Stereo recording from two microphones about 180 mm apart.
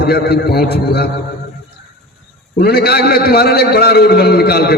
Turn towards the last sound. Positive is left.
turn(degrees=60)  # may be behind; listen again after turning